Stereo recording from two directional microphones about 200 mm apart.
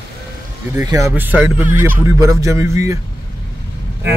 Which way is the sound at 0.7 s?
15° right (ahead or behind).